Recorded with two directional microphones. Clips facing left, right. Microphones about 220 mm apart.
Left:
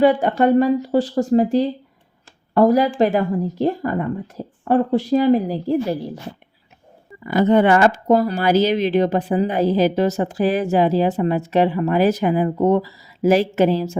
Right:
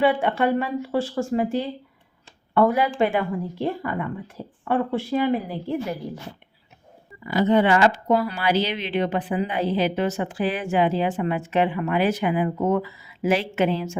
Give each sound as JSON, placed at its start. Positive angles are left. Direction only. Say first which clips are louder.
{"t": 0.0, "sound": "a woman's voice", "louder": "left 5 dB", "side_deg": 40}
{"t": 7.3, "sound": "a woman's voice", "louder": "left 4 dB", "side_deg": 50}